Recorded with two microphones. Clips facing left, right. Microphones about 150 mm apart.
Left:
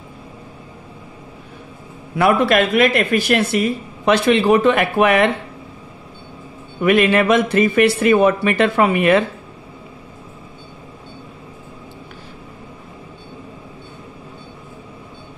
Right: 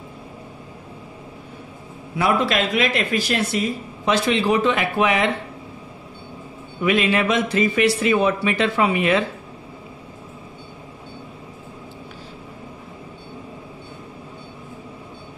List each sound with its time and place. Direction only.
2.1 s speech: 60° left (ahead or behind)
6.8 s speech: 55° left (ahead or behind)